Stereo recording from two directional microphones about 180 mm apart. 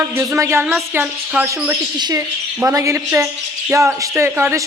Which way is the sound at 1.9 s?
25° right (ahead or behind).